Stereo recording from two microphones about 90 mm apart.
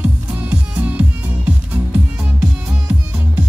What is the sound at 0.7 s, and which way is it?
Music, 15° right (ahead or behind).